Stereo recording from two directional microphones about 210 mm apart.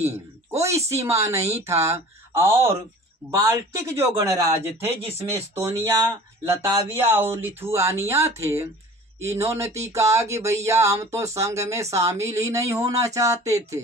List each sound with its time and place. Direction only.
0.6 s speech: 15° right (ahead or behind)